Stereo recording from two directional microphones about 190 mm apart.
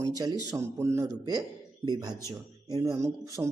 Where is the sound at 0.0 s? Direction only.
20° right (ahead or behind).